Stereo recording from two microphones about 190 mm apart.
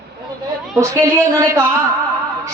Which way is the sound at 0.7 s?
15° right (ahead or behind).